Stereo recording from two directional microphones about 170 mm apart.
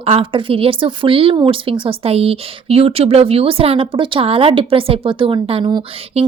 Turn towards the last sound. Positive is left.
turn(degrees=-35)  # may be behind; listen again after turning